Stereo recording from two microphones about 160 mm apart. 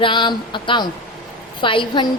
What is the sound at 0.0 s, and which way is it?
A woman's voice, 30° left (ahead or behind).